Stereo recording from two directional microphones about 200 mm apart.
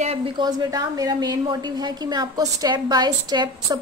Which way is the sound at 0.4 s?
20° right (ahead or behind).